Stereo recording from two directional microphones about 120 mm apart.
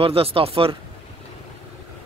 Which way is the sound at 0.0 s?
50° right (ahead or behind).